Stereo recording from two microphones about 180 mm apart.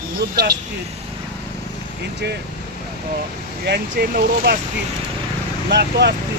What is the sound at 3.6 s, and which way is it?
Speech, 60° right (ahead or behind).